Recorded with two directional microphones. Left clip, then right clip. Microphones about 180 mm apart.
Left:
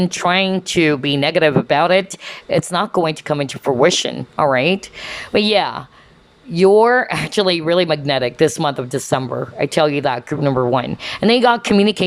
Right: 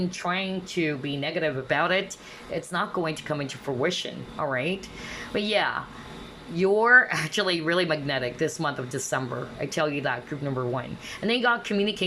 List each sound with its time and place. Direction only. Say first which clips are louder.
0.0 s speech: left 12 dB; 35° left (ahead or behind)